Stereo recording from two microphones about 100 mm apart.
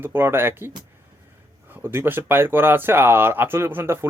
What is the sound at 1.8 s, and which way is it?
Speech, 25° right (ahead or behind).